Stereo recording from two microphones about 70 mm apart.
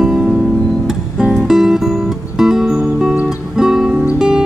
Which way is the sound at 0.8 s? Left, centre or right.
Centre.